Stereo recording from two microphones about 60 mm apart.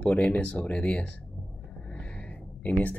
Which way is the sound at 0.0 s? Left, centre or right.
Centre.